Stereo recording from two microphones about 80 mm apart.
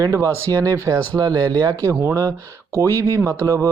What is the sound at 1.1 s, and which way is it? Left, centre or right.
Speech, right.